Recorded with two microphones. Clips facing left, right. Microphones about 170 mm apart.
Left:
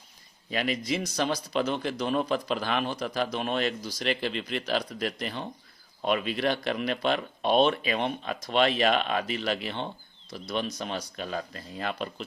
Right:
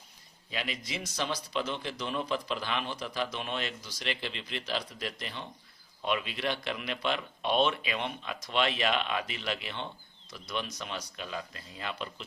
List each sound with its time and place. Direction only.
0.5 s a man's voice: 45° left (ahead or behind)
11.2 s a man's voice: 45° left (ahead or behind)